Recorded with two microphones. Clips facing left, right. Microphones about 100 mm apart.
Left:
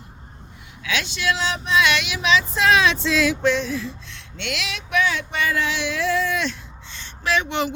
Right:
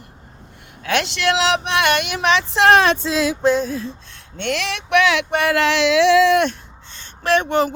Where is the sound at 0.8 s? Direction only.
55° right (ahead or behind).